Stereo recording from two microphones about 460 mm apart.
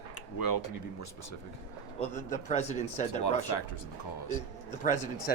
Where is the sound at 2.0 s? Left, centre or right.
Centre.